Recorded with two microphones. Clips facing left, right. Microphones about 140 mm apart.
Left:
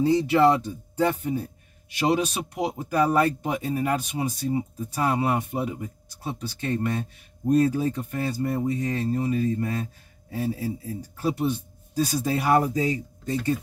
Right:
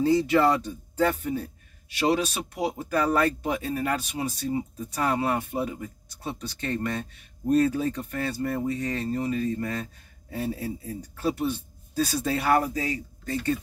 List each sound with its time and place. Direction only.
0.0 s speech: 15° left (ahead or behind)